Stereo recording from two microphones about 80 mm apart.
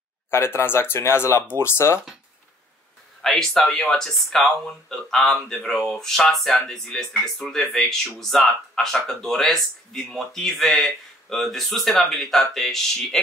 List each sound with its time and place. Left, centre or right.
0.3 s speech: left
3.2 s speech: centre